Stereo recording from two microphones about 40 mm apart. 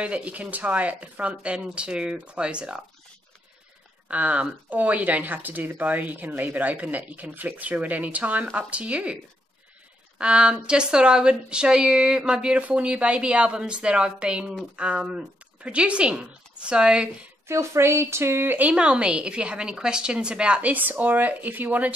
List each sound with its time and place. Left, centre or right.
0.0 s a woman's voice: right
4.1 s a woman's voice: right
17.7 s speech: right
18.6 s a woman's voice: right
20.6 s speech: right